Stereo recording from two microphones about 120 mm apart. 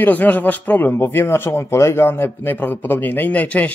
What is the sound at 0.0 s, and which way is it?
Speech, 15° left (ahead or behind).